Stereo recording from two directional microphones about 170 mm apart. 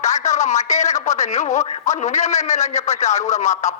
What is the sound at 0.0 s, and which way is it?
Speech, 45° left (ahead or behind).